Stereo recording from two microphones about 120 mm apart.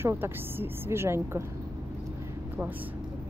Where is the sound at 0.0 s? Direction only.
20° right (ahead or behind).